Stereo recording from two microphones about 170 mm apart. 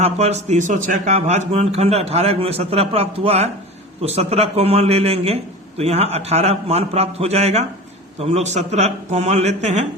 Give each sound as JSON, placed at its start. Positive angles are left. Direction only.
{"t": 0.0, "sound": "a man's voice", "side_deg": -40}